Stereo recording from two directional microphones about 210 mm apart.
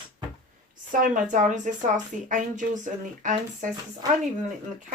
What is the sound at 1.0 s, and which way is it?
Speech, 35° right (ahead or behind).